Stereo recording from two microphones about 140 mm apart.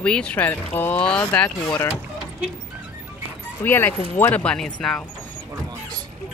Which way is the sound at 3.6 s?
15° left (ahead or behind).